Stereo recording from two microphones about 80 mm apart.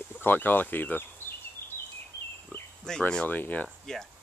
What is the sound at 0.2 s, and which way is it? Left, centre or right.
Speech, left.